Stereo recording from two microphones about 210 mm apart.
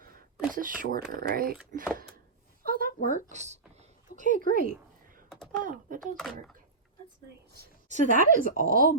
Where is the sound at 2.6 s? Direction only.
45° right (ahead or behind).